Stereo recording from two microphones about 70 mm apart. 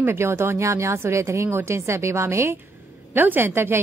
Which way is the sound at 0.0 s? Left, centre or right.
Right.